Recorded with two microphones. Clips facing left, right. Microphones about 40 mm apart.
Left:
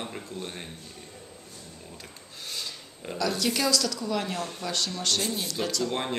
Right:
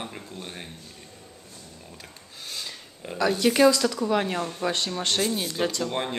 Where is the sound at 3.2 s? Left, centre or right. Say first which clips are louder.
Right 7 dB; right.